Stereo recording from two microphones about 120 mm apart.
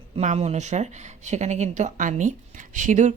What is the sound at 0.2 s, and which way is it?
Speech, 70° right (ahead or behind).